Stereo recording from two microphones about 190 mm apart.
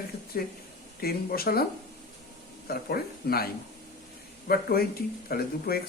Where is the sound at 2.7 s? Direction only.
55° left (ahead or behind).